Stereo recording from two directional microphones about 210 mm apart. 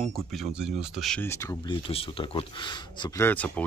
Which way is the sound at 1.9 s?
25° left (ahead or behind).